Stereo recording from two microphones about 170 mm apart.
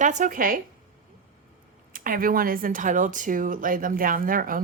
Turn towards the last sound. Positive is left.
turn(degrees=-55)  # may be behind; listen again after turning